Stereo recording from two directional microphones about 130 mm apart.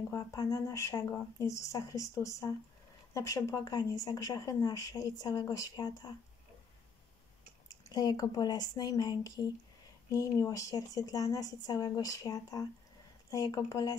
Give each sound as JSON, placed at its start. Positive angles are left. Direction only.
{"t": 0.1, "sound": "speech", "side_deg": 25}
{"t": 7.8, "sound": "speech", "side_deg": 35}